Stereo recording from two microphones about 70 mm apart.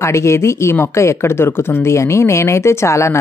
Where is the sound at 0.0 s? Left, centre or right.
Left.